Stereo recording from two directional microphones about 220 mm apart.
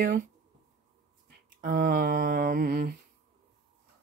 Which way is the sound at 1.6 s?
40° right (ahead or behind).